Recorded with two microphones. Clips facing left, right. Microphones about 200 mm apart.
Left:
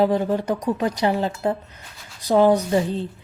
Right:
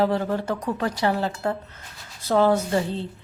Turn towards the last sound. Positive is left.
turn(degrees=15)  # may be behind; listen again after turning